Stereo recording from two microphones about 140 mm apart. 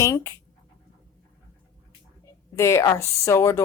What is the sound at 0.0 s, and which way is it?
Speech, 20° left (ahead or behind).